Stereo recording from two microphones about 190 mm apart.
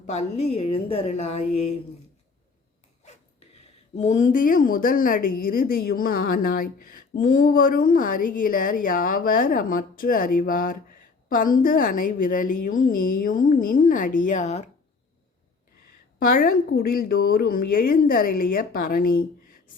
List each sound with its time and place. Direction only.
0.0 s a woman's voice: 35° left (ahead or behind)
3.9 s a woman's voice: 40° left (ahead or behind)
16.1 s a woman's voice: 50° left (ahead or behind)